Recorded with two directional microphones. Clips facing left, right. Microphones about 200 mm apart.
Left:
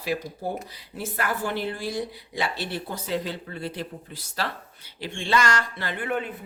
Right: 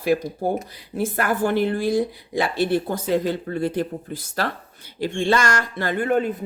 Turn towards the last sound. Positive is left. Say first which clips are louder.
# right 8 dB
turn(degrees=-40)  # may be behind; listen again after turning